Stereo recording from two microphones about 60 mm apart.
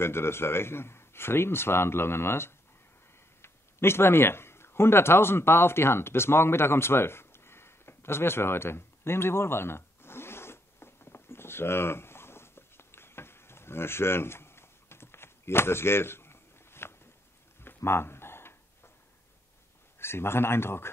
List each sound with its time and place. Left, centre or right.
0.0 s a man's voice: left
3.4 s a sound: left
20.0 s a man's voice: left